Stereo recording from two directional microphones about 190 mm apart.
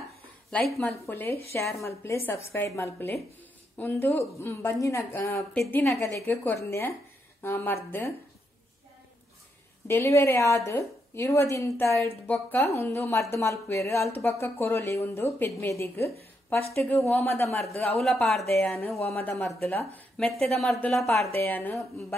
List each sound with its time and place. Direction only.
0.5 s a woman's voice: 5° left (ahead or behind)
9.8 s a woman's voice: 15° left (ahead or behind)
18.0 s a woman's voice: centre (ahead or behind)
19.0 s a woman's voice: 10° left (ahead or behind)